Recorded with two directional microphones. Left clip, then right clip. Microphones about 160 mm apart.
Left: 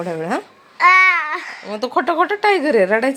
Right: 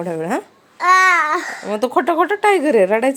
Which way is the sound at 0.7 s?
35° right (ahead or behind).